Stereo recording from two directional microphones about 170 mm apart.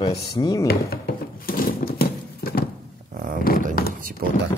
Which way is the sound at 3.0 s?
50° right (ahead or behind).